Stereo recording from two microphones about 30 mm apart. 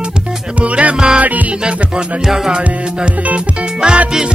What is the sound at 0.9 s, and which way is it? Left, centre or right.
Music, right.